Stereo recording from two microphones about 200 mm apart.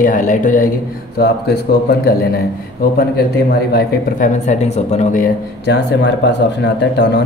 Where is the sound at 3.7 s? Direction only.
45° left (ahead or behind).